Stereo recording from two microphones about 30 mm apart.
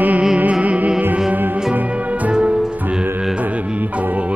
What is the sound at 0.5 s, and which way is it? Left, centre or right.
Music, right.